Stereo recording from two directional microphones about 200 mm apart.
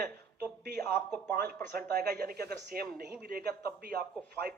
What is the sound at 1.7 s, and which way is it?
A man's voice, 50° right (ahead or behind).